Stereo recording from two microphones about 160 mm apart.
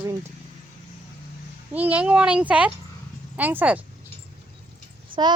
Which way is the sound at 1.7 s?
10° right (ahead or behind).